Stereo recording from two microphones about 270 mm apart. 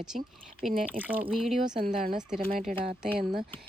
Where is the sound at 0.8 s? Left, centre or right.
Centre.